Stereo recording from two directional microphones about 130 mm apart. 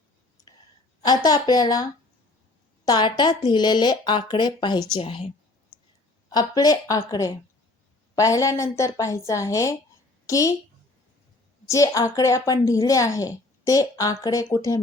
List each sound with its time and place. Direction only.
0.4 s clicking: 25° left (ahead or behind)
1.0 s a woman's voice: 30° left (ahead or behind)
4.9 s a woman's voice: 45° left (ahead or behind)
6.3 s a woman's voice: 30° left (ahead or behind)
11.7 s a woman's voice: 25° left (ahead or behind)